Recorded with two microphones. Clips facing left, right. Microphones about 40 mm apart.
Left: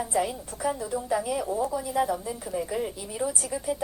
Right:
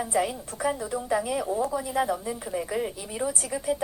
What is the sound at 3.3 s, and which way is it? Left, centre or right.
Speech, right.